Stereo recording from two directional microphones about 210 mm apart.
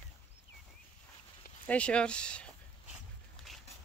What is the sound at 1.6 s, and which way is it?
Speech, 5° left (ahead or behind).